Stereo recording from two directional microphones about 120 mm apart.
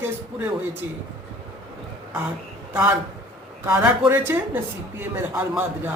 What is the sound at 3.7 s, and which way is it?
Speech, 15° right (ahead or behind).